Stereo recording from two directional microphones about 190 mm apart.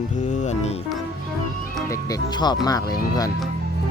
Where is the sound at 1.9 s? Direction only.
20° left (ahead or behind).